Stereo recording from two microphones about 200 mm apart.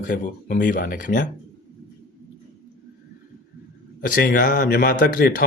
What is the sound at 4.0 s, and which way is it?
Speech, 45° left (ahead or behind).